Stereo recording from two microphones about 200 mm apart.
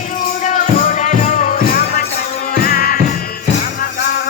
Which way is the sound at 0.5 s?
35° left (ahead or behind).